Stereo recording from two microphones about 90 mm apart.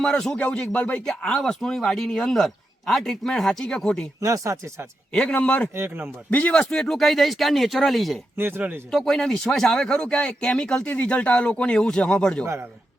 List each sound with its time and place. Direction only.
0.0 s speech: 5° left (ahead or behind)
0.3 s speech: 20° left (ahead or behind)
4.2 s speech: 40° right (ahead or behind)
5.1 s speech: 10° left (ahead or behind)
5.7 s speech: 25° right (ahead or behind)
6.3 s speech: 15° left (ahead or behind)
8.4 s speech: 25° right (ahead or behind)
8.9 s speech: 5° left (ahead or behind)